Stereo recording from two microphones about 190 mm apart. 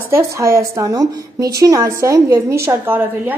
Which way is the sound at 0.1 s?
15° right (ahead or behind).